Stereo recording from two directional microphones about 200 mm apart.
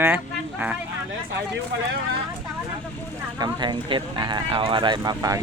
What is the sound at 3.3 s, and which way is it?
Speech, 20° right (ahead or behind).